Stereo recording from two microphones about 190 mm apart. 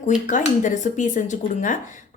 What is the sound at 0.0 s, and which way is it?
A woman's voice, 40° left (ahead or behind).